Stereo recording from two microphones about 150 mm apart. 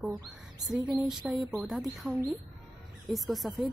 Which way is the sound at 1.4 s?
Centre (ahead or behind).